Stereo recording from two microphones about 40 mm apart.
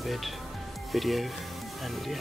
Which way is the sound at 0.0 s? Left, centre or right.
Centre.